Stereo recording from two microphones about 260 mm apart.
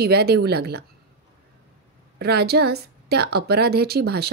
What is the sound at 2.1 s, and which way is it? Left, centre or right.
A woman's voice, right.